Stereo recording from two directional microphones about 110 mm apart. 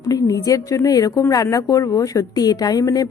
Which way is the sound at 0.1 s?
30° left (ahead or behind).